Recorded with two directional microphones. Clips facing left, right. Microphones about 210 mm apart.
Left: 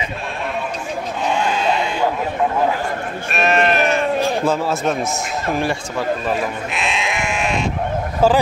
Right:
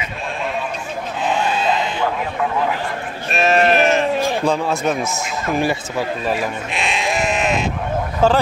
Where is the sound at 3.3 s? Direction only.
35° right (ahead or behind).